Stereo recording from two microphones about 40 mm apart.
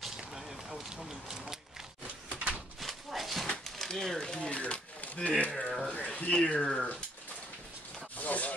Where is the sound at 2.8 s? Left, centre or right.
Centre.